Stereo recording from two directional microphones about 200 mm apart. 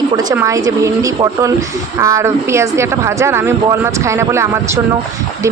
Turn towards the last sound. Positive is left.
turn(degrees=-15)  # may be behind; listen again after turning